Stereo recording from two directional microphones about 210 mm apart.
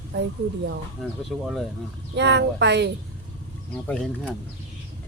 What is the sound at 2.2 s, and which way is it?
Speech, 55° right (ahead or behind).